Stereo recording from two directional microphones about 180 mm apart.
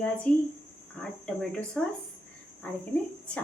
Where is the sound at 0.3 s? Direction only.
5° left (ahead or behind).